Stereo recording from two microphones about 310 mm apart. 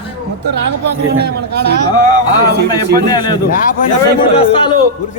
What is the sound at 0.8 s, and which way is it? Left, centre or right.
A man's voice, right.